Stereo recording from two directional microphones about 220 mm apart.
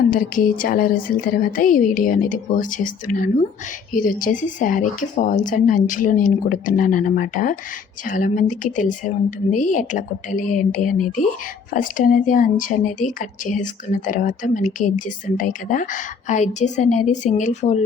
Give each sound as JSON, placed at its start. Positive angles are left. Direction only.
{"t": 0.1, "sound": "speech", "side_deg": 40}